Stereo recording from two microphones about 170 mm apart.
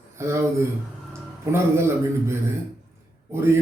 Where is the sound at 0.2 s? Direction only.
15° right (ahead or behind).